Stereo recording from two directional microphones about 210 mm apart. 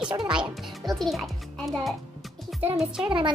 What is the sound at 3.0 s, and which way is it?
Speech, 25° right (ahead or behind).